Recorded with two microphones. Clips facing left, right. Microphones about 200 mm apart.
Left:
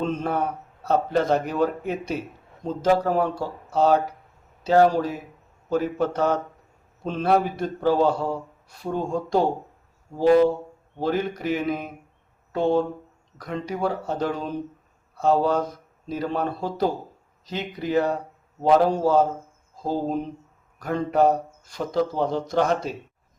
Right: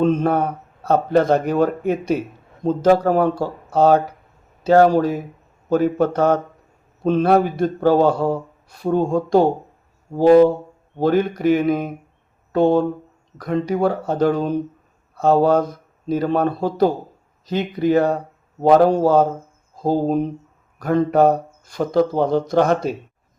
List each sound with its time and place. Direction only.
0.0 s speech: 55° right (ahead or behind)